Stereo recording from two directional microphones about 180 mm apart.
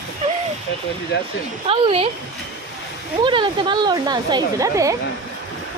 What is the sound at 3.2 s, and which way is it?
Speech, 25° right (ahead or behind).